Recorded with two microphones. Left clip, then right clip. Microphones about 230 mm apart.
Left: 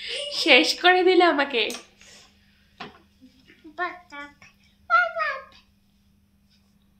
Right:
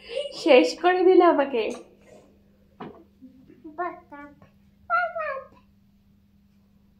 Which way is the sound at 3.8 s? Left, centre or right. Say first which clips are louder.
Left 2 dB; centre.